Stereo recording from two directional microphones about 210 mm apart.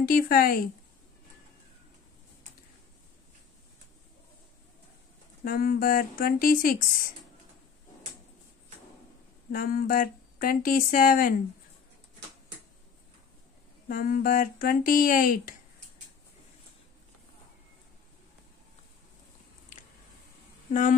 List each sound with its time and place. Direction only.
0.0 s speech: 45° left (ahead or behind)
5.4 s speech: 45° left (ahead or behind)
9.5 s speech: 40° left (ahead or behind)
13.8 s speech: 40° left (ahead or behind)